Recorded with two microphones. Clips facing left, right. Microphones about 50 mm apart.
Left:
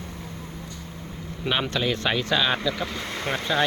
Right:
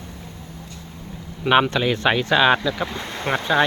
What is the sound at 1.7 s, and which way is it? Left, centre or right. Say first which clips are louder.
Speech: right 5 dB; right.